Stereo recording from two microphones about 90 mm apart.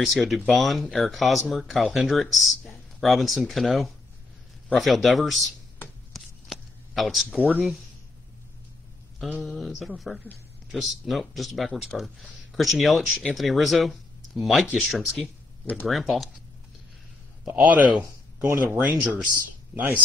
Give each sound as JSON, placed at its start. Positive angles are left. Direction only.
{"t": 0.0, "sound": "speech", "side_deg": 0}
{"t": 6.1, "sound": "a sound", "side_deg": 0}
{"t": 7.3, "sound": "speech", "side_deg": -15}
{"t": 9.4, "sound": "speech", "side_deg": 0}
{"t": 17.6, "sound": "speech", "side_deg": -15}